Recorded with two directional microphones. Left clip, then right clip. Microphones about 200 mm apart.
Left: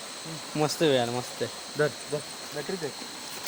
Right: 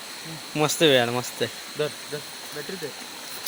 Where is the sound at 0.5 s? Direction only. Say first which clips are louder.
Right 5 dB; 15° right (ahead or behind).